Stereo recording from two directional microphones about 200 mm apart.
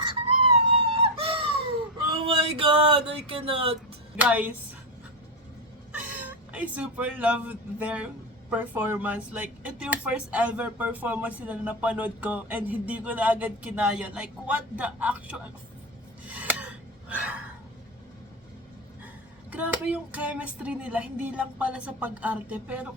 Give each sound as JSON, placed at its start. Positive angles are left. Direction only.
{"t": 0.5, "sound": "whimper", "side_deg": -30}
{"t": 2.1, "sound": "a sound", "side_deg": -25}
{"t": 4.2, "sound": "speech", "side_deg": -10}
{"t": 5.9, "sound": "speech", "side_deg": -5}
{"t": 16.3, "sound": "a sound", "side_deg": -5}
{"t": 19.5, "sound": "speech", "side_deg": -5}